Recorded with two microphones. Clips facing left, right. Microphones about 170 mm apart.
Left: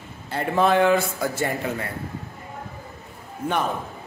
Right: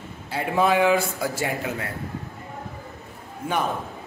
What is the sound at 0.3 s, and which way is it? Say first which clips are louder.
A man's voice: left 1 dB; 5° right (ahead or behind).